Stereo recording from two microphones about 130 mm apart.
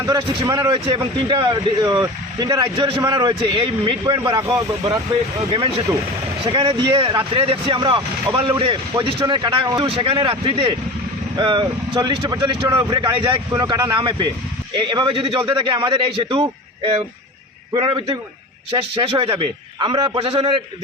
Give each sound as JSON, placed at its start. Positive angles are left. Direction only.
{"t": 0.0, "sound": "speech", "side_deg": -35}
{"t": 3.0, "sound": "speech", "side_deg": -30}
{"t": 6.4, "sound": "speech", "side_deg": -40}
{"t": 19.0, "sound": "a man's voice", "side_deg": -45}